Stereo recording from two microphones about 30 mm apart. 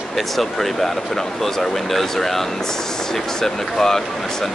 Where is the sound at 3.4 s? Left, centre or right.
Centre.